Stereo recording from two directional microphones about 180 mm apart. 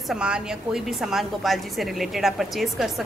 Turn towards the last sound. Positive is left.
turn(degrees=0)  # may be behind; listen again after turning